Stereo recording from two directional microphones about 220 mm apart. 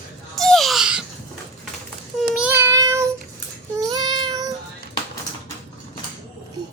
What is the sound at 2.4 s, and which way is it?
Child singing, 10° right (ahead or behind).